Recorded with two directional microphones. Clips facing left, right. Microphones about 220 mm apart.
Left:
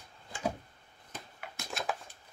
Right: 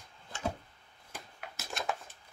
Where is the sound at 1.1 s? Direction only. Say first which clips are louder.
Left 1 dB; 5° right (ahead or behind).